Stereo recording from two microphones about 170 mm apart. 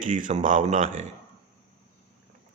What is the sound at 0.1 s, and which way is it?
Speech, 50° right (ahead or behind).